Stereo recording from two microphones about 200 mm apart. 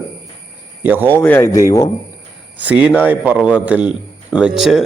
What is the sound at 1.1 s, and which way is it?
Speech, 10° left (ahead or behind).